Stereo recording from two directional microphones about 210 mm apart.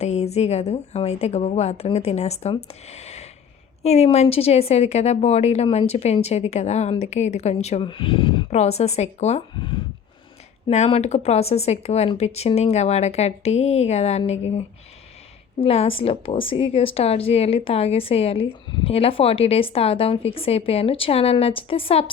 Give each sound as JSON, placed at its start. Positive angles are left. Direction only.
{"t": 0.0, "sound": "a woman's voice", "side_deg": 30}
{"t": 2.9, "sound": "a sound", "side_deg": 30}
{"t": 3.8, "sound": "a woman's voice", "side_deg": 30}
{"t": 15.6, "sound": "a woman's voice", "side_deg": 30}